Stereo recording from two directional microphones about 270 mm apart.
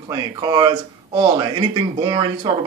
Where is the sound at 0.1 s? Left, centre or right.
Centre.